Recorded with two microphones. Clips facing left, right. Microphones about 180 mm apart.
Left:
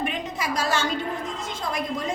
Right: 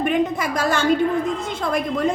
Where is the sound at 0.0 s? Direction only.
55° right (ahead or behind).